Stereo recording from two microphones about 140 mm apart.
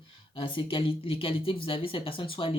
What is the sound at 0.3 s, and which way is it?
Speech, 40° left (ahead or behind).